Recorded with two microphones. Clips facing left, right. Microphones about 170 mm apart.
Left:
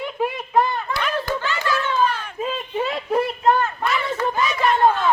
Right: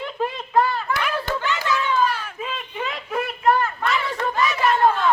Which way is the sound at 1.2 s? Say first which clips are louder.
Left 1 dB; 20° right (ahead or behind).